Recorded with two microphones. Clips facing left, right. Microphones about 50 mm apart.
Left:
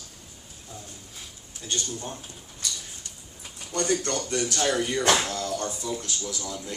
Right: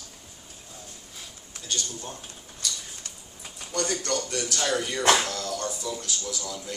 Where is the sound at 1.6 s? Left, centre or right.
Left.